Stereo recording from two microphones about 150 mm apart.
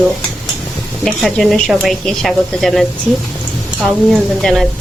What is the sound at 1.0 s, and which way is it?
Speech, 5° left (ahead or behind).